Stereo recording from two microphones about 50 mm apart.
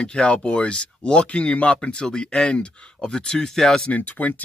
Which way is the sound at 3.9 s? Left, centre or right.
Left.